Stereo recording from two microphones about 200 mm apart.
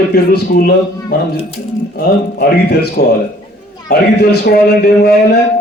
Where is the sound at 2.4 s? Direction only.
55° left (ahead or behind).